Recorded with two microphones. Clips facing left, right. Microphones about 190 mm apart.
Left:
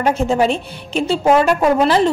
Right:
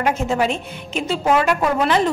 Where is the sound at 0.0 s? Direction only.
35° left (ahead or behind).